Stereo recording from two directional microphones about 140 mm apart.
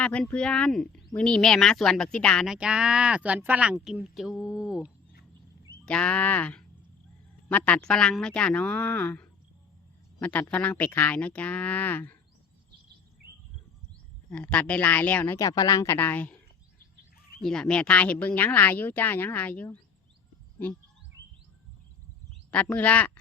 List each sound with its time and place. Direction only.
0.0 s speech: 10° left (ahead or behind)
2.5 s speech: 5° right (ahead or behind)
5.8 s speech: 10° left (ahead or behind)
14.3 s speech: 5° left (ahead or behind)
15.4 s speech: 25° left (ahead or behind); by 16.4 s 10° left (ahead or behind)
17.4 s speech: 5° left (ahead or behind)
22.5 s speech: 10° left (ahead or behind)